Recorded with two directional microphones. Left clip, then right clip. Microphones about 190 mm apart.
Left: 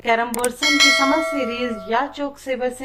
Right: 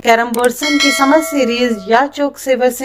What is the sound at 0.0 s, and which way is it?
Speech, 40° right (ahead or behind).